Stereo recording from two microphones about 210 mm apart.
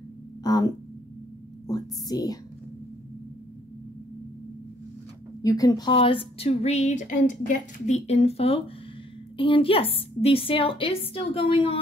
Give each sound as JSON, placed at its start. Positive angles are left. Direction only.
{"t": 0.4, "sound": "a sound", "side_deg": 20}
{"t": 1.7, "sound": "a woman's voice", "side_deg": 20}
{"t": 5.4, "sound": "speech", "side_deg": 15}